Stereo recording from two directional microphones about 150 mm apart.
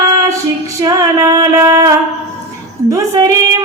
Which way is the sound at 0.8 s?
20° right (ahead or behind).